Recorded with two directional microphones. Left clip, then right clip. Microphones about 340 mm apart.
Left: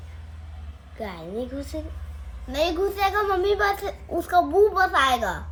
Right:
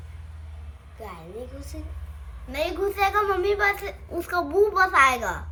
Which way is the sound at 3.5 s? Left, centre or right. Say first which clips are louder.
Even; centre.